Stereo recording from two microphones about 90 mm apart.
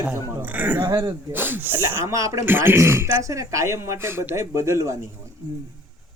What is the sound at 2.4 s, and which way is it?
Speech, 25° right (ahead or behind).